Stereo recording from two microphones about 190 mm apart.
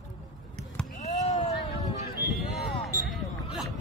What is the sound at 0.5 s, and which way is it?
Basketball bounce, 5° left (ahead or behind).